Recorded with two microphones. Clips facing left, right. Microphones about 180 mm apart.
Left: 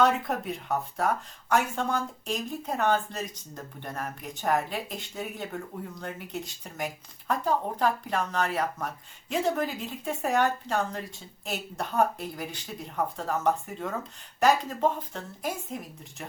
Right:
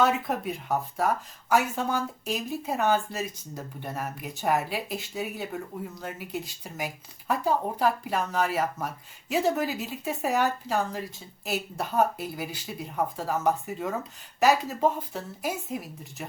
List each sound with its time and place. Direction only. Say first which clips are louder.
0.0 s speech: even; centre (ahead or behind)